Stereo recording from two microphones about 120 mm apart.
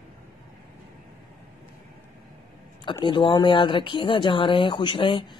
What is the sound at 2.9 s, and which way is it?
Speech, 40° left (ahead or behind).